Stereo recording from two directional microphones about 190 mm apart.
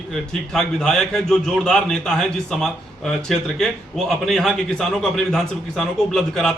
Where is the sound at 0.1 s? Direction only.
5° left (ahead or behind).